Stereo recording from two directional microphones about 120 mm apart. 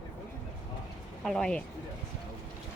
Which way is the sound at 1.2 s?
5° left (ahead or behind).